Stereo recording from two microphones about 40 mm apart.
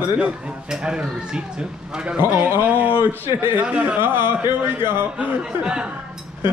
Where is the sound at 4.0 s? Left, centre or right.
Right.